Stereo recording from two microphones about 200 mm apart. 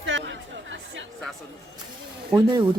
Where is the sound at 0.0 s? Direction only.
65° right (ahead or behind).